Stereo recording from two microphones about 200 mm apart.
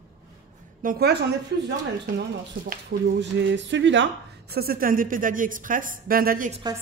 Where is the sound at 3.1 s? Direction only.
65° right (ahead or behind); by 6.5 s 45° right (ahead or behind).